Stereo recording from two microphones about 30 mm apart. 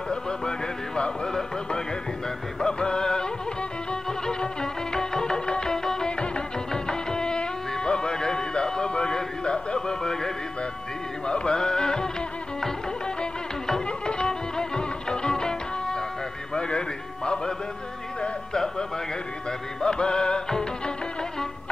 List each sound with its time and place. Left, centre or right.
0.1 s speech: left
2.6 s speech: left
3.9 s music: left
6.0 s music: left
9.8 s speech: centre
11.2 s speech: left
13.8 s music: left
19.8 s speech: left